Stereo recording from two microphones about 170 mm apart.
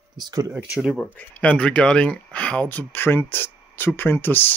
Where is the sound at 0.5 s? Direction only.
5° right (ahead or behind).